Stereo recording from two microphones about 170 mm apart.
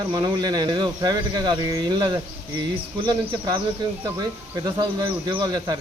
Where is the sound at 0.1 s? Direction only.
25° right (ahead or behind).